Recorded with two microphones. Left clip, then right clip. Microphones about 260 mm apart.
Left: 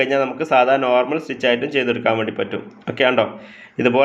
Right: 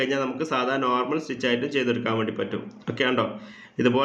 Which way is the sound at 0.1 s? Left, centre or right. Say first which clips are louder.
Left 9 dB; centre.